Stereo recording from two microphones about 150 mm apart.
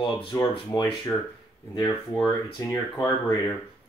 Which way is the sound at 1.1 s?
35° left (ahead or behind).